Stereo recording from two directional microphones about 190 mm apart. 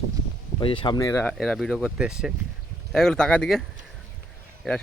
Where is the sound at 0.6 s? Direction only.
25° left (ahead or behind).